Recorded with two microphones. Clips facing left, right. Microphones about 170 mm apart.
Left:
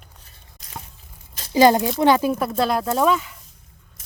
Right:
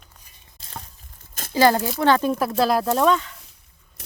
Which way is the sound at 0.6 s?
30° right (ahead or behind).